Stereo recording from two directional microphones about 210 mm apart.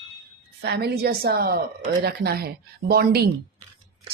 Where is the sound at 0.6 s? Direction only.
50° right (ahead or behind).